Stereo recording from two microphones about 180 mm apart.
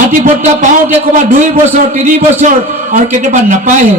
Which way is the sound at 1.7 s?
40° right (ahead or behind).